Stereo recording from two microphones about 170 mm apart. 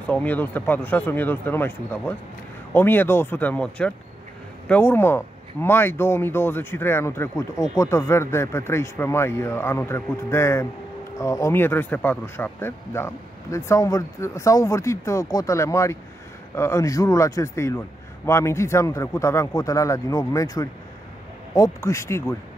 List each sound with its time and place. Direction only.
0.0 s speech: 10° left (ahead or behind)